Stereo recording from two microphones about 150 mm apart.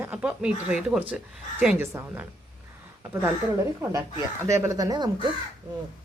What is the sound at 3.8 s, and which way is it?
A woman's voice, 20° right (ahead or behind).